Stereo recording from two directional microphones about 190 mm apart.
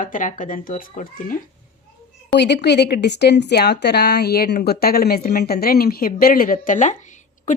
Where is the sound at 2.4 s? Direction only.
65° left (ahead or behind).